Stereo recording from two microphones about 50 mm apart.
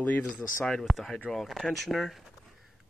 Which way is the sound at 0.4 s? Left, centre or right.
Centre.